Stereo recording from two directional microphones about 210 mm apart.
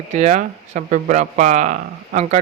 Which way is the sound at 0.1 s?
35° right (ahead or behind).